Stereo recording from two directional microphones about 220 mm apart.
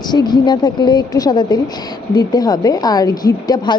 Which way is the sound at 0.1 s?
20° left (ahead or behind).